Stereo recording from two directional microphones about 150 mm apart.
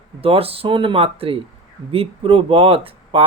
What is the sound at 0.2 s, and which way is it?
Speech, 40° right (ahead or behind).